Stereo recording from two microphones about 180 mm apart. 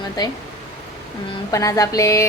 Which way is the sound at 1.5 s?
20° left (ahead or behind).